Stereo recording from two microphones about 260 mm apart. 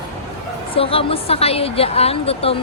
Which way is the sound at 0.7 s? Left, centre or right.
Left.